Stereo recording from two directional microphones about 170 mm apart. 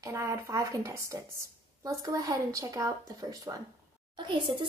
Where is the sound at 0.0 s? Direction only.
15° right (ahead or behind).